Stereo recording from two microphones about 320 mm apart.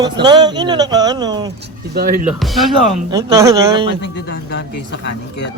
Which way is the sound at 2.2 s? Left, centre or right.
Centre.